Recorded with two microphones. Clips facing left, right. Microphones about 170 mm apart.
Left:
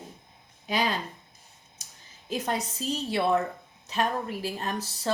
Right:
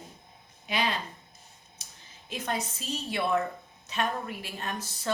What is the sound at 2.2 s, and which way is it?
Speech, 35° left (ahead or behind).